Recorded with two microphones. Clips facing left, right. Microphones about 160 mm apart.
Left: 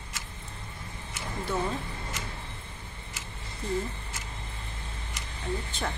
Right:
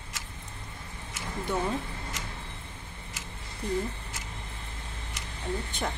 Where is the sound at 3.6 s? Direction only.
15° right (ahead or behind).